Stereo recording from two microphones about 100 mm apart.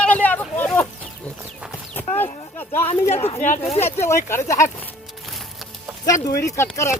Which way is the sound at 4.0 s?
25° left (ahead or behind).